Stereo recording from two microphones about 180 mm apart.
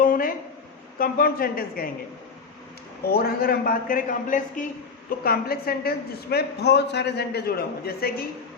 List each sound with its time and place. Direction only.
0.0 s a sound: 50° left (ahead or behind)
0.9 s a woman's voice: 55° left (ahead or behind)
3.1 s a man's voice: 60° left (ahead or behind)
5.2 s a woman's voice: 55° left (ahead or behind)